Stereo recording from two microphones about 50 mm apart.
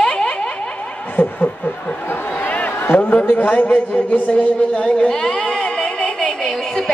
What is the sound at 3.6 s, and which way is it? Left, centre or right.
Speech, left.